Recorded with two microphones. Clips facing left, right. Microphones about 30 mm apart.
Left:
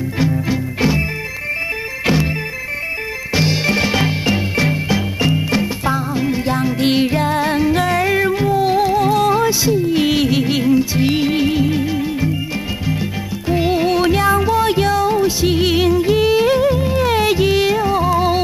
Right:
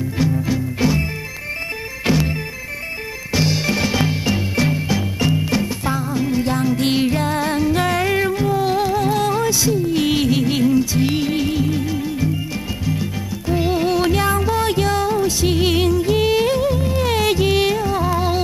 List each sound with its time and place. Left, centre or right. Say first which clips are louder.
0.2 s music: left 1 dB; centre
2.0 s music: left 1 dB; centre
3.3 s music: left 3 dB; centre
15.6 s music: left 2 dB; left
15.9 s music: left 3 dB; centre